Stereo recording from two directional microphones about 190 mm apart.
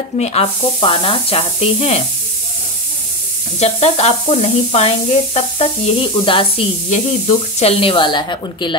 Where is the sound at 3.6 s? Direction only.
35° left (ahead or behind).